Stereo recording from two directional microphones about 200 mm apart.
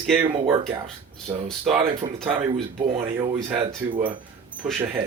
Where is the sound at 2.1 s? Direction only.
Centre (ahead or behind).